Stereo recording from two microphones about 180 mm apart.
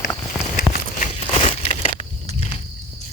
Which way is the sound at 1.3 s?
30° left (ahead or behind).